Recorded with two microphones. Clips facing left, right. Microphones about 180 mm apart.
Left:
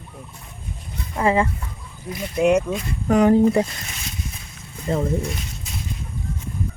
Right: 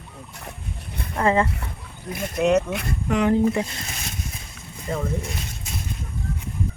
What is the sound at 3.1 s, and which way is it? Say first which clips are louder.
Speech: left 5 dB; 35° left (ahead or behind).